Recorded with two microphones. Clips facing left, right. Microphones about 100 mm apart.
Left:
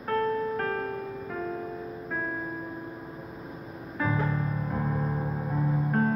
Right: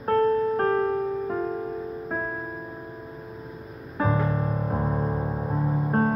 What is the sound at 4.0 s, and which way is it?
Music, 40° right (ahead or behind).